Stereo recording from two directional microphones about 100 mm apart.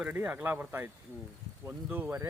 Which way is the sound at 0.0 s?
15° right (ahead or behind).